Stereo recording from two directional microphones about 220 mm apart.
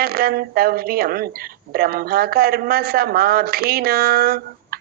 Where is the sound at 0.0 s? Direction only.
45° right (ahead or behind).